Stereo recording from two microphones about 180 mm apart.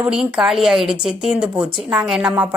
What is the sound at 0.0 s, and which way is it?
A woman's voice, 5° right (ahead or behind).